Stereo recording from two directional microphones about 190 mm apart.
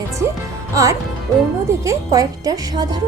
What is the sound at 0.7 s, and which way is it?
A woman's voice, 15° right (ahead or behind).